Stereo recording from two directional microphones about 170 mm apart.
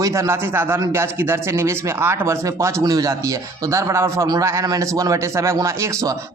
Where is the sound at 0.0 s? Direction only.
15° right (ahead or behind).